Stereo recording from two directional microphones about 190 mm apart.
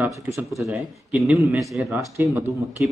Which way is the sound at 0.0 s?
10° right (ahead or behind).